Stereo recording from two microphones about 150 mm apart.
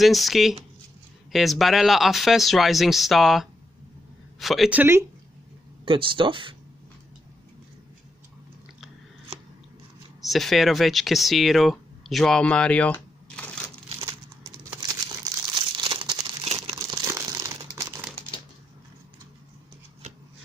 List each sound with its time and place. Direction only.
0.0 s speech: centre (ahead or behind)
5.9 s speech: 35° right (ahead or behind)
10.2 s speech: centre (ahead or behind)
14.0 s crumpling: 25° right (ahead or behind)
16.7 s crumpling: 20° right (ahead or behind)